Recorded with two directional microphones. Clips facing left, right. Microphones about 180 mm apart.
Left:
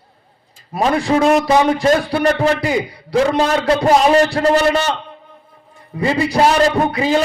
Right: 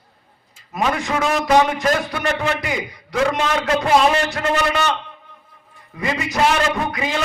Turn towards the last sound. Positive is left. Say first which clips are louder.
# left 7 dB
turn(degrees=30)  # may be behind; listen again after turning